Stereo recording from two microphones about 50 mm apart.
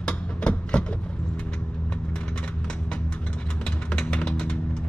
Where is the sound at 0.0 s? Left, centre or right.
Left.